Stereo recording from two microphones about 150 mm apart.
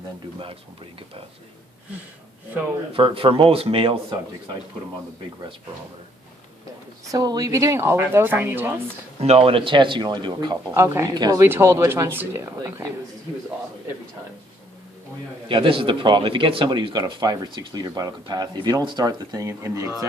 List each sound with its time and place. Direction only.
2.9 s speech: 35° right (ahead or behind)
7.1 s speech: 25° right (ahead or behind)
9.2 s speech: 40° right (ahead or behind)
10.7 s speech: 15° right (ahead or behind)
15.4 s a man's voice: 35° right (ahead or behind)